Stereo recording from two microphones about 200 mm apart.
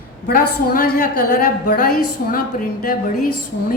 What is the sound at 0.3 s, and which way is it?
Speech, 45° left (ahead or behind).